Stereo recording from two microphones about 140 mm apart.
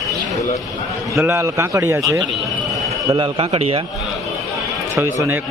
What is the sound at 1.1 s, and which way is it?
A man's voice, 20° right (ahead or behind).